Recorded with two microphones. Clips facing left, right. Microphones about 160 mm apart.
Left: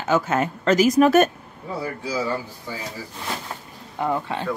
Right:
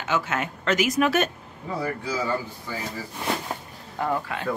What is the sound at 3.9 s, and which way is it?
Speech, 20° left (ahead or behind).